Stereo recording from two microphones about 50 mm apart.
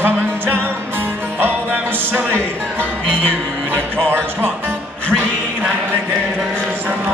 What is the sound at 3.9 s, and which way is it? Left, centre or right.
Speech, right.